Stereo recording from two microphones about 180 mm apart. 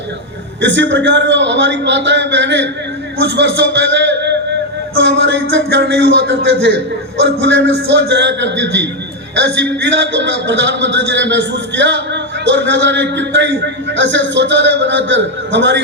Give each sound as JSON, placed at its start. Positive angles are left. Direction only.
{"t": 0.6, "sound": "a man's voice", "side_deg": -80}
{"t": 5.0, "sound": "a man's voice", "side_deg": -90}